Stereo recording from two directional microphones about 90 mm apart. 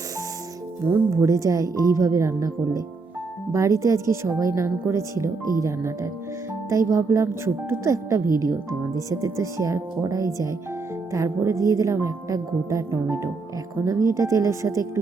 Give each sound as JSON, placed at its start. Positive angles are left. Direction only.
{"t": 1.1, "sound": "a woman's voice", "side_deg": -35}